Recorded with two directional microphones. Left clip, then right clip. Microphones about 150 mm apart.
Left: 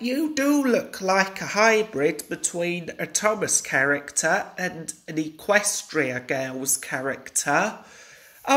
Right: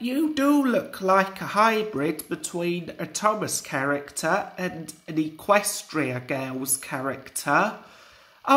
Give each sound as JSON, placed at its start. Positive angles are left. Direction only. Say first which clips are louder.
{"t": 0.0, "sound": "speech", "louder": "even", "side_deg": -30}